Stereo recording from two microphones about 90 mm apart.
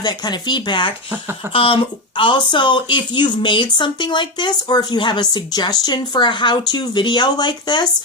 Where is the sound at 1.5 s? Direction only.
90° left; by 7.8 s 55° left (ahead or behind).